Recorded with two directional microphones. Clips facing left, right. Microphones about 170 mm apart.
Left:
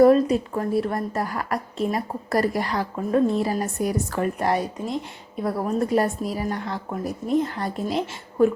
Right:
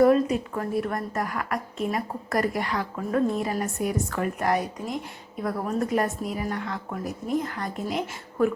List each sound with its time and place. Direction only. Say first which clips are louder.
0.0 s a woman's voice: left 4 dB; 35° left (ahead or behind)